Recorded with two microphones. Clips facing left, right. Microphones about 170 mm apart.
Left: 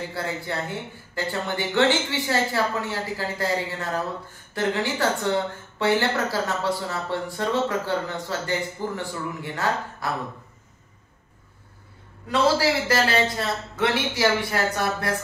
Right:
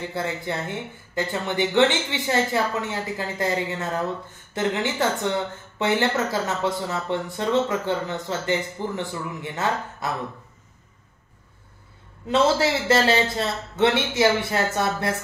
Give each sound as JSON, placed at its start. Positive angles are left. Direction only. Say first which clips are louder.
{"t": 0.1, "sound": "speech", "louder": "right 2 dB", "side_deg": -20}
{"t": 12.3, "sound": "speech", "louder": "right 1 dB", "side_deg": -25}